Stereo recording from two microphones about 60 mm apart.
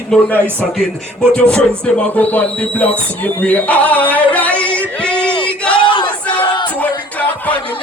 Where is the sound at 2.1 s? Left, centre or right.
Left.